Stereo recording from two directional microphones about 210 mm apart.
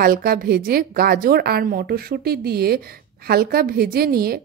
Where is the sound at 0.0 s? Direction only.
45° right (ahead or behind).